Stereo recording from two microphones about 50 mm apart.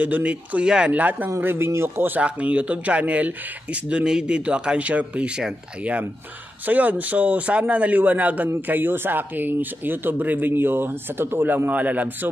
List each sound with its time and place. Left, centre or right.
0.0 s speech: right
0.7 s speech: centre
0.9 s speech: right
1.4 s speech: right
1.7 s a man's voice: right
2.2 s speech: right
4.0 s speech: centre
6.6 s speech: right